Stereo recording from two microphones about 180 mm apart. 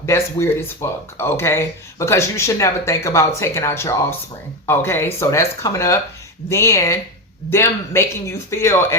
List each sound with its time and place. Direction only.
0.0 s speech: 15° left (ahead or behind)